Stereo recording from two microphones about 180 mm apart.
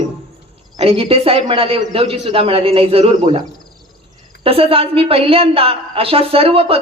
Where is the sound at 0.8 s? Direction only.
30° right (ahead or behind).